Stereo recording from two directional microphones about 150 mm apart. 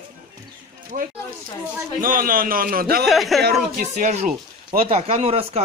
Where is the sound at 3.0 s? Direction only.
Centre (ahead or behind).